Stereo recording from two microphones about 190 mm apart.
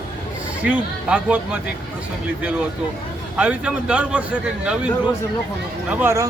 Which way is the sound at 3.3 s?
5° right (ahead or behind).